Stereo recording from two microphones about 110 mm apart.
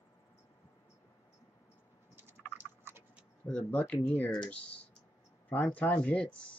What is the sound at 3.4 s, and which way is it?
Speech, 10° left (ahead or behind).